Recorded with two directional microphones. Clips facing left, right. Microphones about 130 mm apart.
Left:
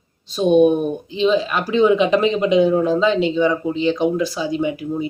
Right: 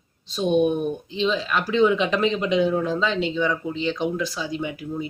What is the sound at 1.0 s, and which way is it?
Speech, 10° left (ahead or behind).